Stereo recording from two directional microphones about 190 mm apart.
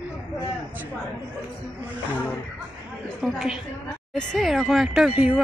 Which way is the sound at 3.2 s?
Centre (ahead or behind).